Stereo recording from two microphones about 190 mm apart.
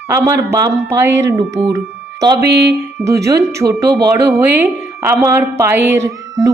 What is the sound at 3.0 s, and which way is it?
A woman's voice, 15° right (ahead or behind).